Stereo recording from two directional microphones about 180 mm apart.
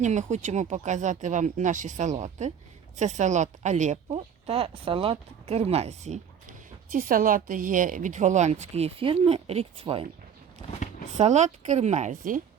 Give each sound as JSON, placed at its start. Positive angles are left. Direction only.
{"t": 0.0, "sound": "a woman's voice", "side_deg": -40}
{"t": 6.9, "sound": "a woman's voice", "side_deg": -50}
{"t": 11.2, "sound": "a woman's voice", "side_deg": -40}